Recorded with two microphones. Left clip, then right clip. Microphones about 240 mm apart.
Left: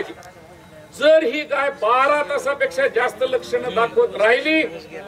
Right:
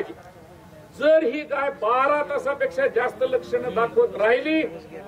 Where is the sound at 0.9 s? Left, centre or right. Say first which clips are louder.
Left 4 dB; centre.